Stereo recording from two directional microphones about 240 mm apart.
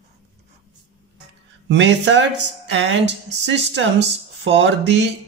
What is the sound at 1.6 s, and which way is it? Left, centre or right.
Speech, right.